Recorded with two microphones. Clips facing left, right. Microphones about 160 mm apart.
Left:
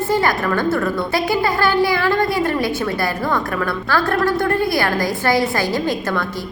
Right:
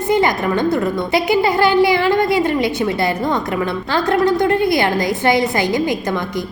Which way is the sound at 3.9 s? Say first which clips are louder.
Right 3 dB; 20° right (ahead or behind).